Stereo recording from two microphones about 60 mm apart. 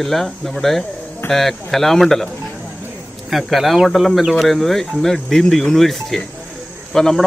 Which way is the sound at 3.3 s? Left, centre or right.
Centre.